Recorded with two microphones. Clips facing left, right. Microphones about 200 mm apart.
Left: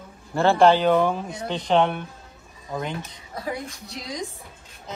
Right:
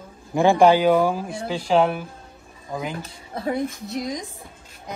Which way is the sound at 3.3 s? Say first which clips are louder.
Right 5 dB; 25° right (ahead or behind).